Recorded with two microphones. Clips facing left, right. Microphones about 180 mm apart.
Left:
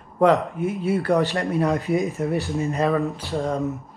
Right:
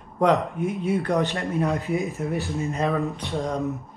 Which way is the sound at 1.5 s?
35° left (ahead or behind).